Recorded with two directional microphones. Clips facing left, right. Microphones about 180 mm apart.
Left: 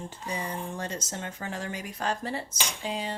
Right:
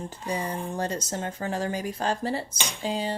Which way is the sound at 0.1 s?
35° right (ahead or behind).